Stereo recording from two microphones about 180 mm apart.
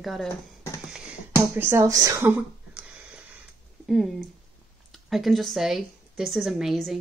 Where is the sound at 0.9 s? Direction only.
10° right (ahead or behind).